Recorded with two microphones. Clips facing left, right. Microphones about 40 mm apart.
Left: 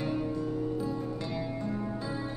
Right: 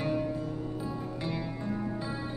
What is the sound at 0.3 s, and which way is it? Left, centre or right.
Music, centre.